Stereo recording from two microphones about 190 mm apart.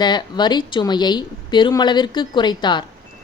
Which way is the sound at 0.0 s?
20° left (ahead or behind).